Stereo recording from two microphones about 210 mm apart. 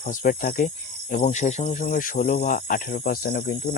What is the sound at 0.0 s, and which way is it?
Speech, 40° left (ahead or behind).